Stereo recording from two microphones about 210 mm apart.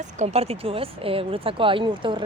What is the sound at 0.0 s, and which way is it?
A woman's voice, 30° right (ahead or behind).